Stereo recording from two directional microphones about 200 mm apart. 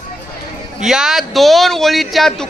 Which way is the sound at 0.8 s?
Centre (ahead or behind).